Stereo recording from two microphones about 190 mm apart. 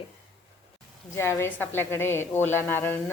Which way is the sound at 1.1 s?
15° left (ahead or behind).